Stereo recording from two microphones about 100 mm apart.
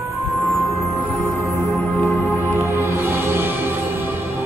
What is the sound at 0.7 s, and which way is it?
Music, 30° left (ahead or behind).